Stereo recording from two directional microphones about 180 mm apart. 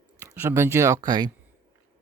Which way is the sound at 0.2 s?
10° right (ahead or behind).